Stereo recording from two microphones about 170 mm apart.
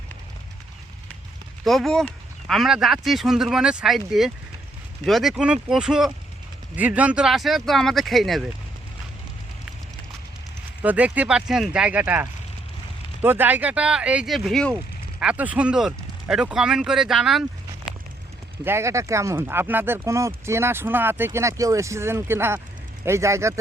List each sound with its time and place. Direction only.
1.6 s speech: centre (ahead or behind)
10.8 s speech: 10° right (ahead or behind)
15.2 s speech: 10° right (ahead or behind)
18.6 s speech: 15° right (ahead or behind)